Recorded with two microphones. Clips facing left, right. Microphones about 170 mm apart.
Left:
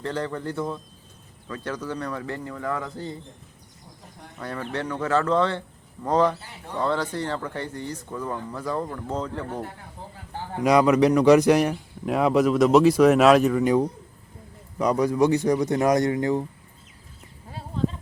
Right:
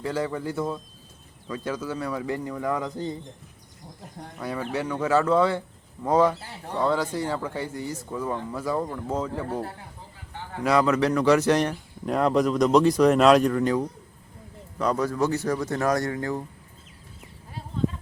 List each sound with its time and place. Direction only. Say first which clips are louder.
0.0 s a man's voice: right 1 dB; 10° right (ahead or behind)
4.4 s a man's voice: right 1 dB; 10° right (ahead or behind)
10.6 s a man's voice: left 4 dB; 15° left (ahead or behind)
14.8 s speech: left 4 dB; 10° left (ahead or behind)